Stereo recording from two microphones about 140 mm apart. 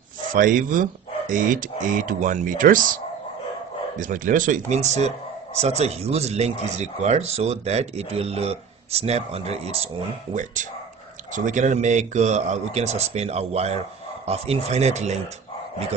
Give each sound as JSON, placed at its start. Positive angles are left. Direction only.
{"t": 0.3, "sound": "speech", "side_deg": -75}
{"t": 4.0, "sound": "speech", "side_deg": -70}
{"t": 10.3, "sound": "speech", "side_deg": -65}